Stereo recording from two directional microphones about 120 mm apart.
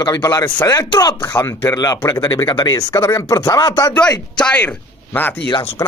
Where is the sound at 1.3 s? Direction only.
20° left (ahead or behind).